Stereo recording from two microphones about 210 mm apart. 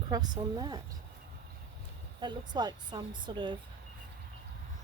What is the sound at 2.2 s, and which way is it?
Speech, 20° right (ahead or behind).